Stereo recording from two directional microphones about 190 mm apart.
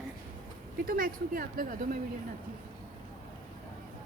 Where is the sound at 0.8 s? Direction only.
50° right (ahead or behind).